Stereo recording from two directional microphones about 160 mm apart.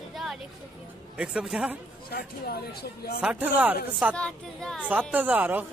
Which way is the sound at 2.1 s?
75° left (ahead or behind).